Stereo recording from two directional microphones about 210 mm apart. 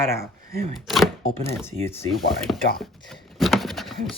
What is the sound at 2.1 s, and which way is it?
Chopping, centre (ahead or behind).